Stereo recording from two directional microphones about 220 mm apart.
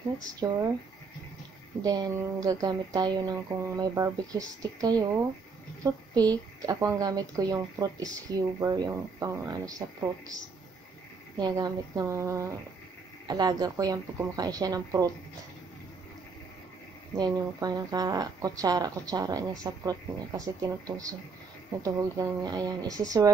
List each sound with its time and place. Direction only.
0.2 s speech: 15° right (ahead or behind)
1.8 s speech: 15° right (ahead or behind)
11.3 s speech: 20° right (ahead or behind)
17.2 s speech: 15° right (ahead or behind)